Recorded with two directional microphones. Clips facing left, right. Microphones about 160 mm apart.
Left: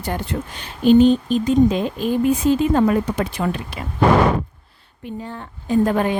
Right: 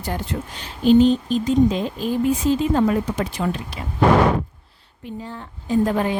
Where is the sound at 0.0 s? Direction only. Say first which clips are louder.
Left 2 dB; 60° left (ahead or behind).